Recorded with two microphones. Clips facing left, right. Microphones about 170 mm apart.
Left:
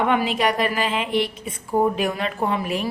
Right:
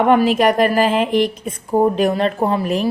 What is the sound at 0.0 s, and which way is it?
A woman's voice, 40° right (ahead or behind).